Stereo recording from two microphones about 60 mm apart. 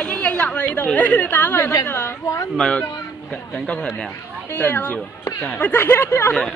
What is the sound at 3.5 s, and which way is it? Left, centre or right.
Speech, centre.